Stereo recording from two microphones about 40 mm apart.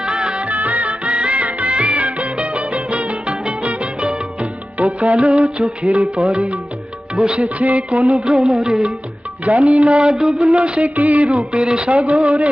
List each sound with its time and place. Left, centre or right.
0.0 s music: right
0.4 s music of bollywood: right
7.2 s music: right
9.4 s music: right